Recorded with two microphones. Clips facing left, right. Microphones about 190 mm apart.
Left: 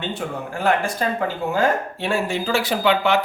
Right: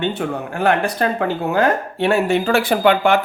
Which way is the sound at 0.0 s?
60° right (ahead or behind).